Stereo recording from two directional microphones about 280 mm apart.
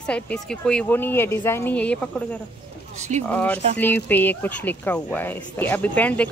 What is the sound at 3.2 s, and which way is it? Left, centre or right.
Speech, centre.